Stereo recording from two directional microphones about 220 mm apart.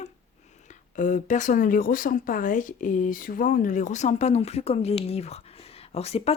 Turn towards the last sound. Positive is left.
turn(degrees=30)  # may be behind; listen again after turning